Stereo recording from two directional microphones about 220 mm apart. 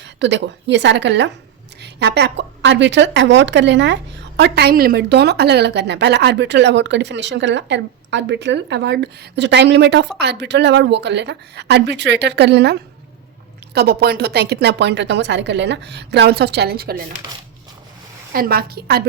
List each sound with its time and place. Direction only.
0.0 s a woman's voice: 55° right (ahead or behind)
18.3 s a woman's voice: 45° right (ahead or behind)